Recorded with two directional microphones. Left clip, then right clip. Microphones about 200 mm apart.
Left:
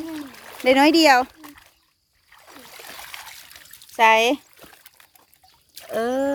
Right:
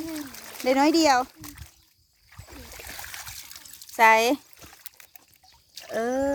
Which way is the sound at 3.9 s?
5° right (ahead or behind).